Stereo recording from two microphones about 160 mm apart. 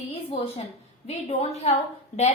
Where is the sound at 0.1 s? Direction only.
40° left (ahead or behind).